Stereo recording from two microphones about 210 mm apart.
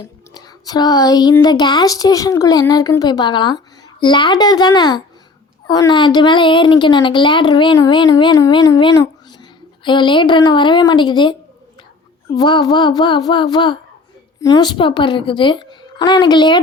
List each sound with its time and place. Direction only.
0.3 s a woman's voice: 20° left (ahead or behind)
12.4 s a woman's voice: 20° left (ahead or behind)